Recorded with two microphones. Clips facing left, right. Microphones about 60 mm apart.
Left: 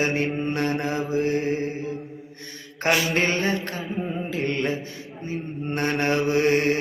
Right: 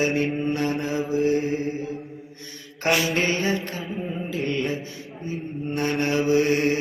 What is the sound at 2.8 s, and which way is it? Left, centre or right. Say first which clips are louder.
Mantra: even; left.